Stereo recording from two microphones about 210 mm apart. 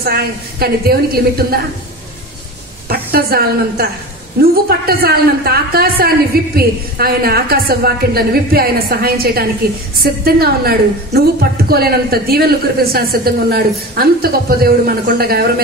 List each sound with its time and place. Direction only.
0.0 s a woman's voice: 50° right (ahead or behind)
2.9 s a woman's voice: 45° right (ahead or behind)